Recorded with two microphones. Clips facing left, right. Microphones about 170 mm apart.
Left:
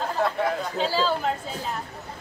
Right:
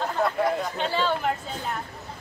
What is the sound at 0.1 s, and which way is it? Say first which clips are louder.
Speech: even; centre (ahead or behind).